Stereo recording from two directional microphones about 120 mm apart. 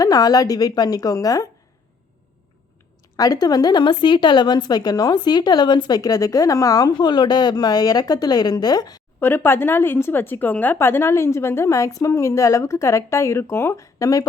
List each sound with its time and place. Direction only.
0.0 s a woman's voice: 35° left (ahead or behind)
3.2 s a woman's voice: 30° left (ahead or behind)
9.2 s a woman's voice: 20° left (ahead or behind)